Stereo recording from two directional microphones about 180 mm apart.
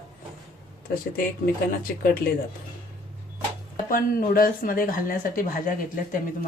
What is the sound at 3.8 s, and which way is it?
Speech, 50° left (ahead or behind).